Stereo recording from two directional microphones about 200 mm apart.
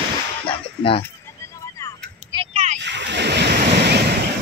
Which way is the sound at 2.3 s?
20° right (ahead or behind).